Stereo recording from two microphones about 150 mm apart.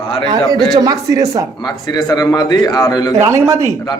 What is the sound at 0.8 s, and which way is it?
Speech, 25° right (ahead or behind).